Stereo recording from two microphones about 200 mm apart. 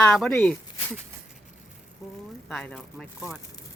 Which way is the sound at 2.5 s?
5° left (ahead or behind).